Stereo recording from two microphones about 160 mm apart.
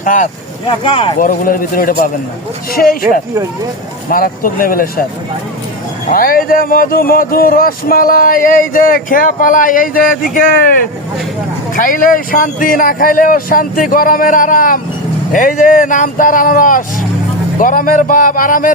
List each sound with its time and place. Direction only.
0.0 s speech: 55° left (ahead or behind)
0.9 s speech: 35° left (ahead or behind)
1.2 s speech: 60° left (ahead or behind)
4.1 s speech: 65° left (ahead or behind)
6.1 s speech: 65° left (ahead or behind)